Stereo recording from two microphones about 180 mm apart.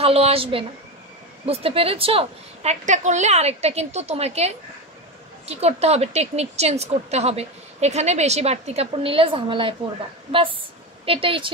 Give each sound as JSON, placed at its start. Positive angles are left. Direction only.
{"t": 0.0, "sound": "a woman's voice", "side_deg": -35}
{"t": 11.1, "sound": "a woman's voice", "side_deg": -30}